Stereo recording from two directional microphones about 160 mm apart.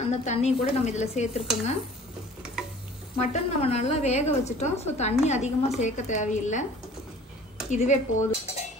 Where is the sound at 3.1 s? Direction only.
45° left (ahead or behind).